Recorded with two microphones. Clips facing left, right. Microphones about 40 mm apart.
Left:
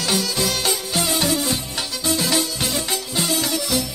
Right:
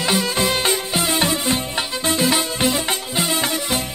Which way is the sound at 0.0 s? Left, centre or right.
Right.